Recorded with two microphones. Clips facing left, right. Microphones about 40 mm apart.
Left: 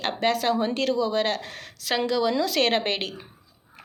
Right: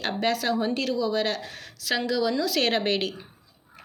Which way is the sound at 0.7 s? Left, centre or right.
Left.